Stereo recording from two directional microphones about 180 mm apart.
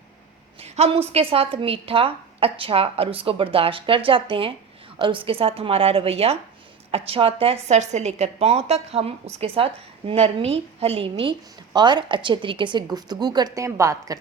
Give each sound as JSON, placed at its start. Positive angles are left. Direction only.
{"t": 0.6, "sound": "a woman's voice", "side_deg": -35}